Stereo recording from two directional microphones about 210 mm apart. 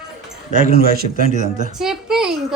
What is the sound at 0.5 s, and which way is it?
A man's voice, 45° right (ahead or behind).